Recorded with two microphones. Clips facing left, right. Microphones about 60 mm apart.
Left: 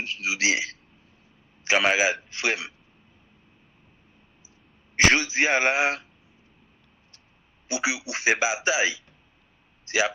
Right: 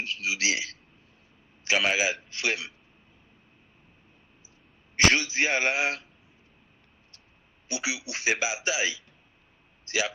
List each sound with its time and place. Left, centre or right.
0.0 s a man's voice: left
4.9 s a man's voice: left
7.7 s a man's voice: left